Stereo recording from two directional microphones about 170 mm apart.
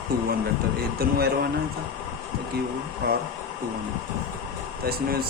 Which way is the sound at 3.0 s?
75° right (ahead or behind).